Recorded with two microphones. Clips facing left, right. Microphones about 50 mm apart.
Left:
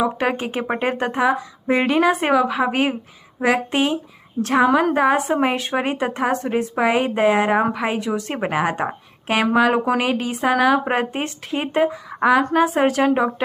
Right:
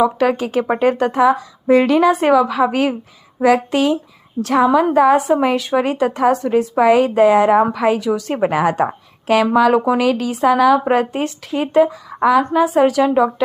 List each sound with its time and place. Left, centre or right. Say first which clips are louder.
0.0 s a woman's voice: right 5 dB; left
6.7 s speech: right 7 dB; left
8.4 s a woman's voice: right 6 dB; centre
12.5 s a woman's voice: right 4 dB; left